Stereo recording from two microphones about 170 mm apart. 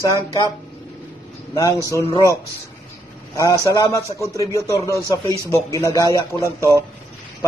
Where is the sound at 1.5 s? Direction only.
20° left (ahead or behind).